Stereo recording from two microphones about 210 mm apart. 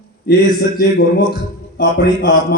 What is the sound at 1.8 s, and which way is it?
Speech, 55° left (ahead or behind).